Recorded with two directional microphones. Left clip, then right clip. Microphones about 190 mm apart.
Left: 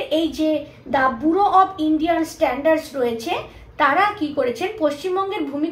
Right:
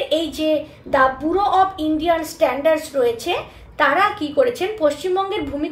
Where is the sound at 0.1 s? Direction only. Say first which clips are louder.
Left 1 dB; 40° right (ahead or behind).